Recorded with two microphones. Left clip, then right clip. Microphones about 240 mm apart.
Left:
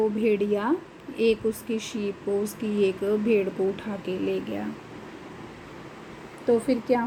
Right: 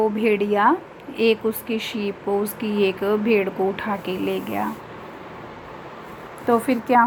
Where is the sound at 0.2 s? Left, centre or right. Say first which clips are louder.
Right 6 dB; centre.